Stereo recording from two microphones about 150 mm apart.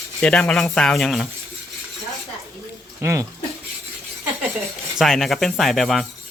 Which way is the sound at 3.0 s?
20° right (ahead or behind).